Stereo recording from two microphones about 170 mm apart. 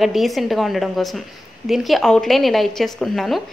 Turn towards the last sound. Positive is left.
turn(degrees=0)  # may be behind; listen again after turning